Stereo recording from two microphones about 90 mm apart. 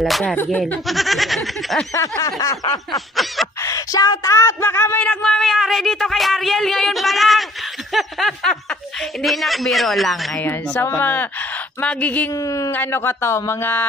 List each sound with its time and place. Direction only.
0.0 s speech: 5° left (ahead or behind)
0.4 s speech: 20° left (ahead or behind)
0.8 s speech: centre (ahead or behind)
2.2 s a sound: 45° left (ahead or behind)
3.6 s speech: 40° left (ahead or behind); by 5.0 s 25° left (ahead or behind)
5.0 s speech: 10° left (ahead or behind)
10.4 s speech: 25° left (ahead or behind)
12.4 s speech: 40° left (ahead or behind)
12.7 s speech: 25° left (ahead or behind)